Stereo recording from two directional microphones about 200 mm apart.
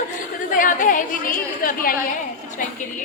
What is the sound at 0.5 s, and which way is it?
A woman's voice, 40° left (ahead or behind).